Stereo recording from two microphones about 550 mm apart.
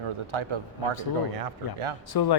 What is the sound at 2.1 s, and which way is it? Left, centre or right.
Speech, left.